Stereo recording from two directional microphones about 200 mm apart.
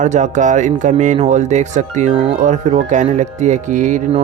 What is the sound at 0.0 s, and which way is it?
Speech, 40° right (ahead or behind).